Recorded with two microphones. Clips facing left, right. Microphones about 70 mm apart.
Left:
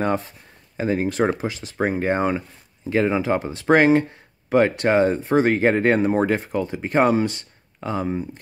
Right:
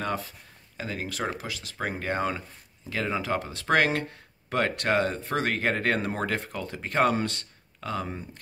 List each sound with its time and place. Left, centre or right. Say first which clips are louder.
0.0 s speech: left 8 dB; left